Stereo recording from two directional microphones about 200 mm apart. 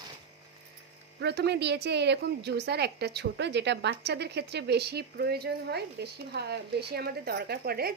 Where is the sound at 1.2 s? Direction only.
55° right (ahead or behind).